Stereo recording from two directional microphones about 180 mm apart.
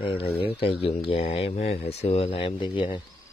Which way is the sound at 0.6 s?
30° left (ahead or behind).